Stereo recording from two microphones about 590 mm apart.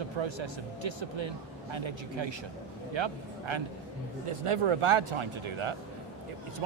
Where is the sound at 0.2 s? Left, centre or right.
Right.